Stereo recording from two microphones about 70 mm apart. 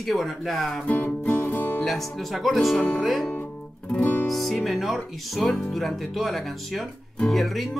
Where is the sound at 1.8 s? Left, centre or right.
Centre.